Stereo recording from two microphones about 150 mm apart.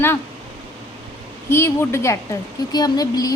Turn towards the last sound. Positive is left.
turn(degrees=25)  # may be behind; listen again after turning